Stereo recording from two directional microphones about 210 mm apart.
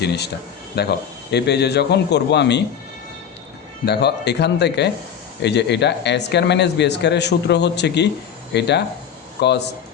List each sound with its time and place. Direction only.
0.0 s a man's voice: 50° left (ahead or behind)
3.8 s a man's voice: 55° left (ahead or behind)